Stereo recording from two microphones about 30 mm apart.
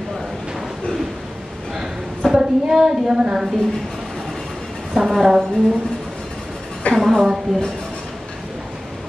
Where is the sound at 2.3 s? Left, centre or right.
Right.